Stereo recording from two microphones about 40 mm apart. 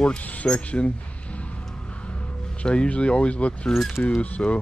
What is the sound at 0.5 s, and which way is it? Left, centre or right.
Speech, left.